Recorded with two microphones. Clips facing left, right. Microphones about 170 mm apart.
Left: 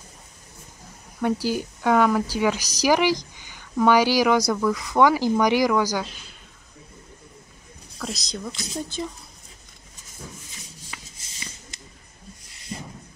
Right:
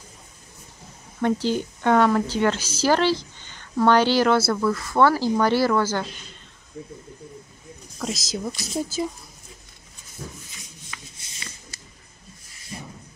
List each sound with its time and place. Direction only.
1.2 s speech: 10° left (ahead or behind)
8.0 s speech: centre (ahead or behind)
10.9 s shuffling cards: 20° left (ahead or behind)